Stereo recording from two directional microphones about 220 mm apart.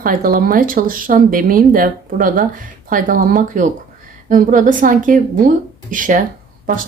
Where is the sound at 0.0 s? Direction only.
40° right (ahead or behind).